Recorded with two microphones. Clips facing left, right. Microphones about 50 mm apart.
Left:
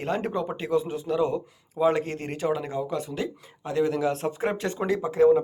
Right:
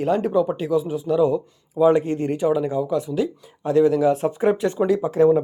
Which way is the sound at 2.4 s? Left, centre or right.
Centre.